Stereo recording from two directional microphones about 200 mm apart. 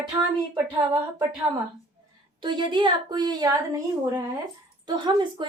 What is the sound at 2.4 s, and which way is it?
A woman's voice, 25° right (ahead or behind).